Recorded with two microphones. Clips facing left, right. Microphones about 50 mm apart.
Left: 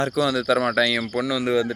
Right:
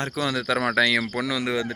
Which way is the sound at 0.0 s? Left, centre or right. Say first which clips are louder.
Left 5 dB; right.